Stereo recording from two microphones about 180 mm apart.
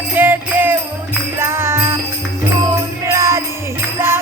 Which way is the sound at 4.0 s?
15° right (ahead or behind).